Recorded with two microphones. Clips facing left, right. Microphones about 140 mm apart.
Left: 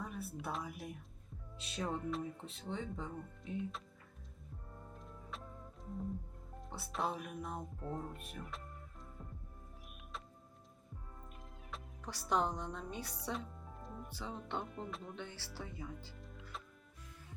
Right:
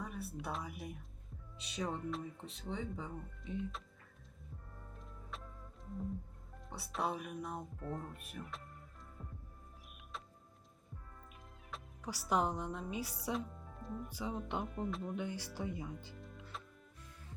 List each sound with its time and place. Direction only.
0.0 s speech: centre (ahead or behind)
4.9 s music: centre (ahead or behind)
6.6 s speech: centre (ahead or behind)
7.8 s speech: 25° left (ahead or behind)
8.1 s speech: centre (ahead or behind)
11.7 s speech: 10° right (ahead or behind)
14.1 s speech: 10° right (ahead or behind)
16.1 s music: centre (ahead or behind)